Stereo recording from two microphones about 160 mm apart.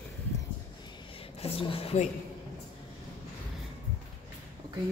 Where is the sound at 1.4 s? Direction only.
35° left (ahead or behind).